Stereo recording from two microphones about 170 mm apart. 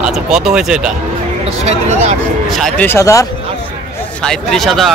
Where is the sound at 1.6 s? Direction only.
40° right (ahead or behind).